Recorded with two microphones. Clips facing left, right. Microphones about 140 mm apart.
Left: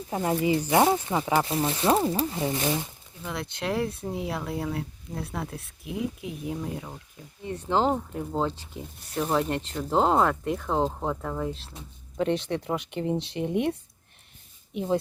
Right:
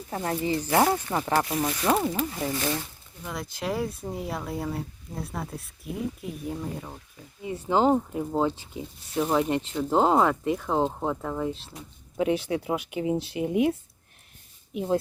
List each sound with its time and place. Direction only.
0.3 s speech: 15° left (ahead or behind)
3.2 s speech: centre (ahead or behind)